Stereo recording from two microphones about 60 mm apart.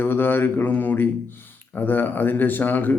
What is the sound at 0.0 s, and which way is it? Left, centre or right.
A man's voice, left.